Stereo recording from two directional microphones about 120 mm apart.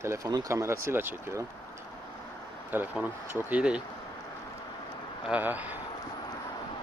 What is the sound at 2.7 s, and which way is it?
Speech, 15° right (ahead or behind).